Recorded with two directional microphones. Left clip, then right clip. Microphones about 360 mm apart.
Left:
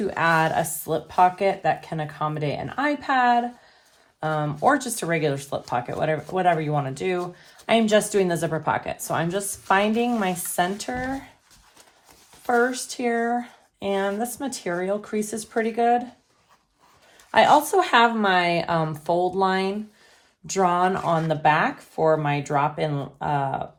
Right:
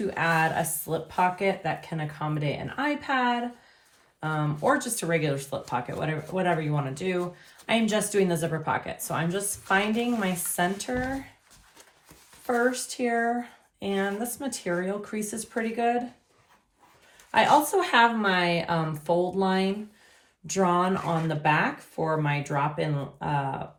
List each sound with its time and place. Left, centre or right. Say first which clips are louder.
0.1 s speech: left 4 dB; left
12.5 s speech: left 4 dB; left
17.3 s speech: left 4 dB; left